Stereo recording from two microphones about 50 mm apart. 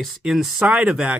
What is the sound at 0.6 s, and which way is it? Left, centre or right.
Speech, right.